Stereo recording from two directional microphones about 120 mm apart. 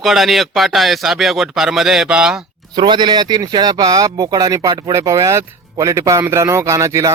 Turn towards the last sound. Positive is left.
turn(degrees=-25)  # may be behind; listen again after turning